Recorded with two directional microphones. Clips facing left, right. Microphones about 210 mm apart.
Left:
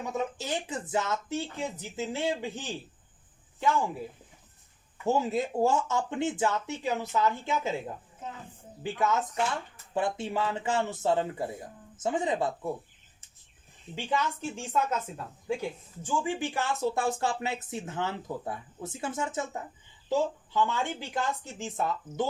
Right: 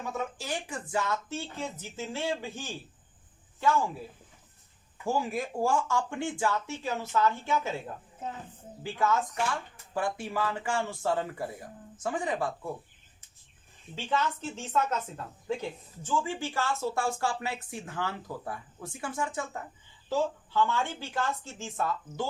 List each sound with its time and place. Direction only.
0.0 s speech: 20° left (ahead or behind)
5.0 s speech: 20° left (ahead or behind)
8.8 s speech: 20° left (ahead or behind)
13.9 s speech: 15° left (ahead or behind)